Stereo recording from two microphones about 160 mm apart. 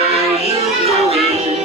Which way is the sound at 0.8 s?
40° right (ahead or behind).